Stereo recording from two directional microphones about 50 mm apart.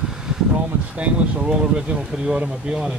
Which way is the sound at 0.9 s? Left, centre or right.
Right.